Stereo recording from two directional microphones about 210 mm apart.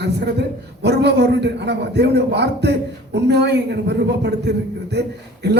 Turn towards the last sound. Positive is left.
turn(degrees=-55)  # may be behind; listen again after turning